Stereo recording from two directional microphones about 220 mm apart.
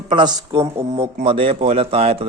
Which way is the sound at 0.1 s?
20° right (ahead or behind).